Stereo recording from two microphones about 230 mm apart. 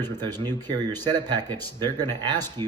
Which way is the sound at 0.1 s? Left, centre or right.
Centre.